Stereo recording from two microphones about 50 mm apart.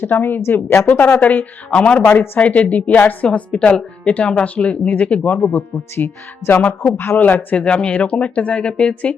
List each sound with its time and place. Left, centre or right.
0.0 s speech: left
3.5 s speech: centre
6.9 s speech: left
7.5 s speech: centre